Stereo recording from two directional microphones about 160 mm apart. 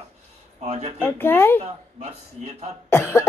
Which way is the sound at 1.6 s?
40° right (ahead or behind).